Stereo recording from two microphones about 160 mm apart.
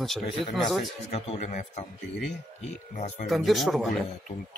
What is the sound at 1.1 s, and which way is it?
Speech, 40° left (ahead or behind).